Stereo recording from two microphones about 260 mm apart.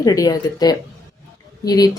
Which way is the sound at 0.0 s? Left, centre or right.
Centre.